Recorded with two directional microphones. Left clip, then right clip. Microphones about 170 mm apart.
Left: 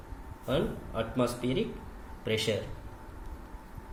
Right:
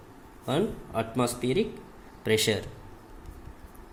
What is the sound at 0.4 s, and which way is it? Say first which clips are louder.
Speech: right 2 dB; 65° right (ahead or behind).